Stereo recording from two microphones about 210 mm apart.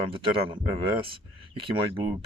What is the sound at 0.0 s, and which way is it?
Speech, 25° right (ahead or behind).